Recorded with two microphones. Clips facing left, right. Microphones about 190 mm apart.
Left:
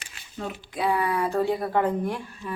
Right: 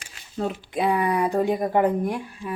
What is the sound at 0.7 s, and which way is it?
Speech, 20° right (ahead or behind).